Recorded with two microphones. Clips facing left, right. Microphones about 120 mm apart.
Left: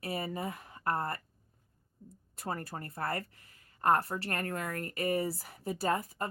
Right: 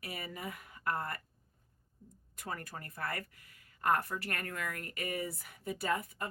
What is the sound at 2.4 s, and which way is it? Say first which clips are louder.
Speech: left 5 dB; 35° left (ahead or behind).